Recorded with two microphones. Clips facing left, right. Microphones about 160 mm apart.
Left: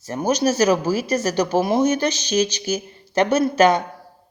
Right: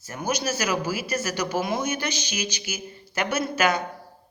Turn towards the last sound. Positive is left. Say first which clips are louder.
# left 8 dB
turn(degrees=40)  # may be behind; listen again after turning